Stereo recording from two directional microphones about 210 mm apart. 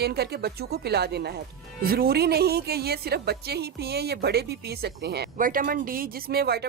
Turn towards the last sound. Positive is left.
turn(degrees=-50)  # may be behind; listen again after turning